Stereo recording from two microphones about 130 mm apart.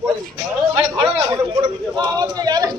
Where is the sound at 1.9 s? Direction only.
35° right (ahead or behind).